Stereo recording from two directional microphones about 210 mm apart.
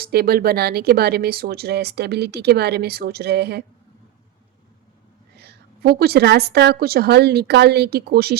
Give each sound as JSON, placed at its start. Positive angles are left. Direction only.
{"t": 0.0, "sound": "speech", "side_deg": -45}
{"t": 5.4, "sound": "speech", "side_deg": -50}